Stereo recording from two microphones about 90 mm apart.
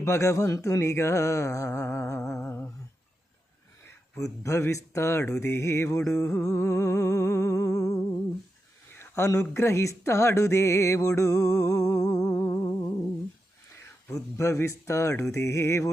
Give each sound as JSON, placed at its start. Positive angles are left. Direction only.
{"t": 0.0, "sound": "speech", "side_deg": 35}
{"t": 2.5, "sound": "a sound", "side_deg": 25}
{"t": 4.2, "sound": "speech", "side_deg": 35}
{"t": 9.0, "sound": "a sound", "side_deg": 30}
{"t": 9.6, "sound": "music", "side_deg": 35}
{"t": 14.1, "sound": "speech", "side_deg": 35}